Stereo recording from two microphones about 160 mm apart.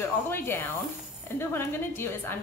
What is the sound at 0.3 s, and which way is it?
A woman's voice, 15° left (ahead or behind).